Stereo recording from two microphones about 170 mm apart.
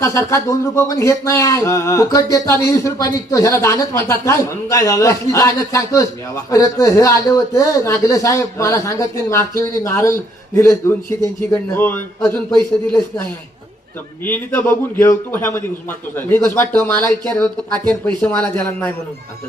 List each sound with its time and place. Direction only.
0.0 s speech: 15° left (ahead or behind)
14.3 s speech: 10° left (ahead or behind)